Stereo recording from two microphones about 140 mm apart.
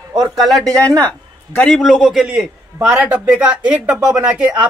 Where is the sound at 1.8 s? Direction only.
Centre (ahead or behind).